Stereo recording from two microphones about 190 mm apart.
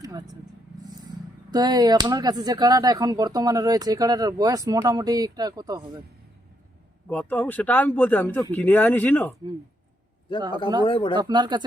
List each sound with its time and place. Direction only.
0.0 s vehicle: 20° right (ahead or behind)
1.5 s speech: 20° right (ahead or behind)
7.1 s speech: 10° left (ahead or behind)
10.8 s speech: 25° left (ahead or behind)
11.2 s speech: 20° right (ahead or behind)